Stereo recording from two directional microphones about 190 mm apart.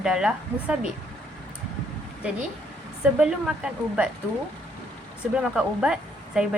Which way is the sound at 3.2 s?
5° right (ahead or behind).